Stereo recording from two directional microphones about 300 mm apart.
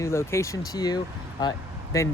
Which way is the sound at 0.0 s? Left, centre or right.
Centre.